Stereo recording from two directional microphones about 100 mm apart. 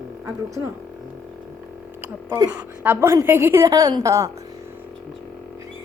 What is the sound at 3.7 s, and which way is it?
Speech, 40° right (ahead or behind).